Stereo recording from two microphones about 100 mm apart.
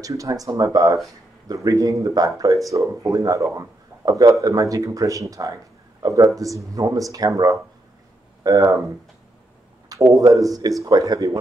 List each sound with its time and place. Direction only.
0.0 s speech: 35° right (ahead or behind)
9.8 s speech: 35° right (ahead or behind)